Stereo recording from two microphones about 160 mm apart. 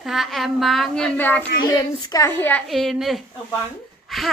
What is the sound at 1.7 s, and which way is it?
Speech, 25° left (ahead or behind).